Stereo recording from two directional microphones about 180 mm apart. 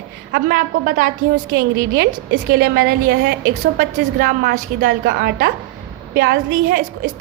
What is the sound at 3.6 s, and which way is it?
A woman's voice, 50° right (ahead or behind).